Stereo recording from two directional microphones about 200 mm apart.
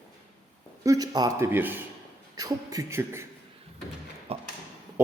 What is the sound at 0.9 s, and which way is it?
A man's voice, 20° right (ahead or behind).